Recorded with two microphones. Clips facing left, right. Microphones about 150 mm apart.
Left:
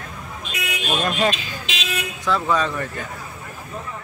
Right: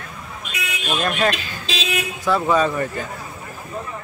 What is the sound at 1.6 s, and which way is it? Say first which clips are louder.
Vehicle: right 6 dB; 35° right (ahead or behind).